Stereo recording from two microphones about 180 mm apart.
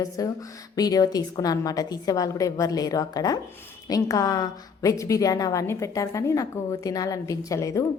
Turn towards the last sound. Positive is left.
turn(degrees=15)  # may be behind; listen again after turning